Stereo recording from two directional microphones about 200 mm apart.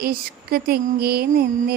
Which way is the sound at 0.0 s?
50° right (ahead or behind).